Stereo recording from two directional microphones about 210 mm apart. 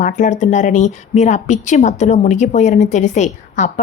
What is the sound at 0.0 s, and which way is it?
A woman's voice, 35° left (ahead or behind).